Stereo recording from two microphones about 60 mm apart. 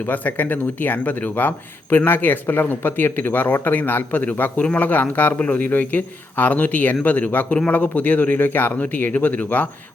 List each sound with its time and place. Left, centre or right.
0.0 s speech: left